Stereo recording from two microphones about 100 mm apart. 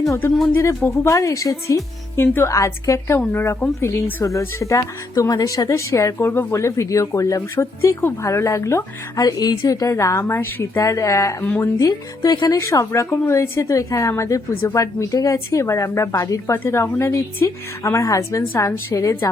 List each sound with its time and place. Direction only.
0.5 s a woman's voice: 30° left (ahead or behind)
11.4 s a woman's voice: 20° left (ahead or behind)
11.8 s speech: 40° left (ahead or behind)
12.5 s a woman's voice: 30° left (ahead or behind)